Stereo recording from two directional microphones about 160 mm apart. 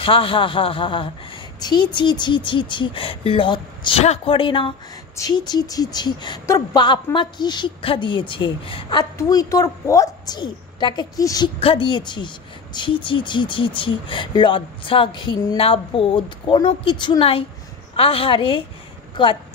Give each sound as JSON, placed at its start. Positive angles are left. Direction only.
{"t": 0.0, "sound": "speech", "side_deg": 35}
{"t": 11.6, "sound": "speech", "side_deg": 35}